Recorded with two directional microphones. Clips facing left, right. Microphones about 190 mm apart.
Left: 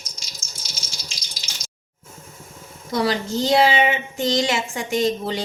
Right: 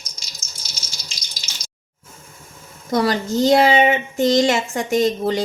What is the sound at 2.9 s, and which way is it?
A woman's voice, 45° right (ahead or behind).